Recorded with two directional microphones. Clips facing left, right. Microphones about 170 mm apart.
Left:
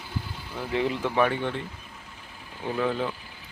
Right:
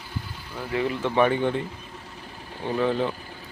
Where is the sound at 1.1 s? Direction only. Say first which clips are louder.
Right 7 dB; centre (ahead or behind).